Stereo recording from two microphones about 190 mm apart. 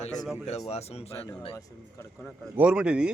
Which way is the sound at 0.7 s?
35° left (ahead or behind).